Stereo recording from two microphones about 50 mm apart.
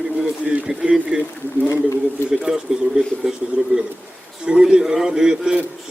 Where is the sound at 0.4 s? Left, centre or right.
Right.